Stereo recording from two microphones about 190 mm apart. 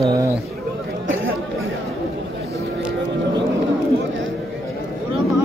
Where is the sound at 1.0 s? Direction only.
90° right.